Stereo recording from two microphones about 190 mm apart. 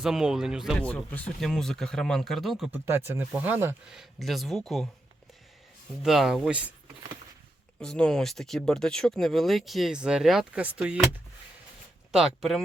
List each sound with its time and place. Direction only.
0.0 s speech: 5° right (ahead or behind)
2.7 s speech: 10° right (ahead or behind)
6.0 s speech: centre (ahead or behind)
7.8 s speech: 5° left (ahead or behind)
12.1 s speech: centre (ahead or behind)